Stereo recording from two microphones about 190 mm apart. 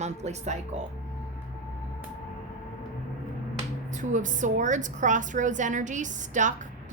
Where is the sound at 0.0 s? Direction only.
35° right (ahead or behind).